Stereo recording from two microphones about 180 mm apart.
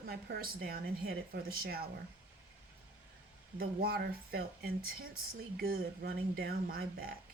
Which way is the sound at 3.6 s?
55° right (ahead or behind).